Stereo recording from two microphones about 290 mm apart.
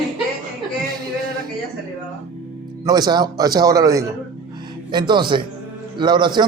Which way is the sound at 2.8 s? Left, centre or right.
Centre.